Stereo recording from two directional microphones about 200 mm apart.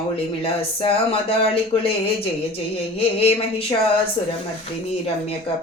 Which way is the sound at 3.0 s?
30° left (ahead or behind).